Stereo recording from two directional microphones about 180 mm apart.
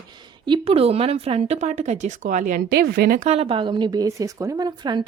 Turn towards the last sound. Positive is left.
turn(degrees=-25)  # may be behind; listen again after turning